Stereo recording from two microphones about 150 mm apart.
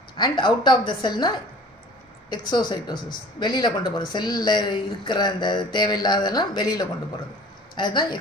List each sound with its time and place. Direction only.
0.2 s speech: 30° left (ahead or behind)
2.5 s speech: 30° left (ahead or behind)